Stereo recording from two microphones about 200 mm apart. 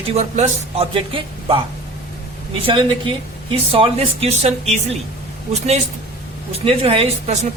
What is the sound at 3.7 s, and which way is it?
Speech, 25° right (ahead or behind).